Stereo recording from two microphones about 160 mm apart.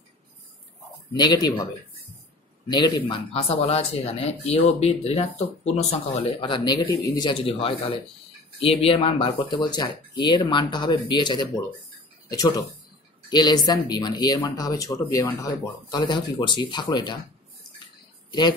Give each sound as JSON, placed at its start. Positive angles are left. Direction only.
{"t": 1.1, "sound": "speech", "side_deg": 25}
{"t": 2.7, "sound": "speech", "side_deg": 25}